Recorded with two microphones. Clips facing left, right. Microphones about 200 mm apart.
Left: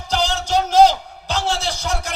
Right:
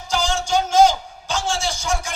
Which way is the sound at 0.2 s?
35° left (ahead or behind).